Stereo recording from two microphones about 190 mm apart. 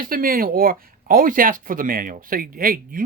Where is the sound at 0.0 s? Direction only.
50° right (ahead or behind).